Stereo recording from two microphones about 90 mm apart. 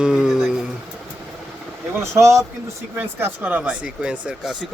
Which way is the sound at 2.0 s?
35° right (ahead or behind).